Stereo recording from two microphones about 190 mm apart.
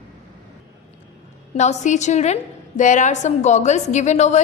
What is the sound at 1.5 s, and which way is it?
A woman's voice, 40° left (ahead or behind).